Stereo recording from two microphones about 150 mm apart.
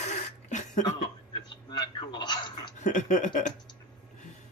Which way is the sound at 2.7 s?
55° left (ahead or behind).